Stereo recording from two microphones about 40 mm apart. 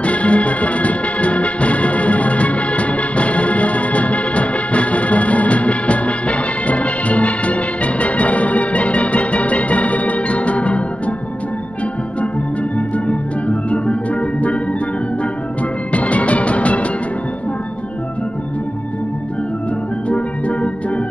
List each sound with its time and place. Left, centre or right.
0.0 s music: left
12.7 s music: left
15.9 s music: left
20.1 s music: left